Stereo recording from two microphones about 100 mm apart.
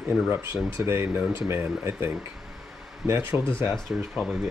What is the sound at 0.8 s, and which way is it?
Speech, 25° right (ahead or behind).